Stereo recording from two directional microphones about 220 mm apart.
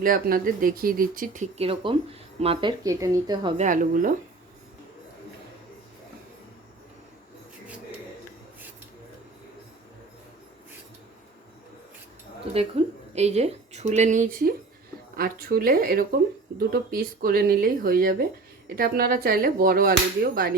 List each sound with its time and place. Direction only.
0.0 s speech: 40° right (ahead or behind); by 3.5 s 15° right (ahead or behind)
3.6 s speech: 35° right (ahead or behind)
12.8 s speech: 25° right (ahead or behind); by 20.5 s 45° right (ahead or behind)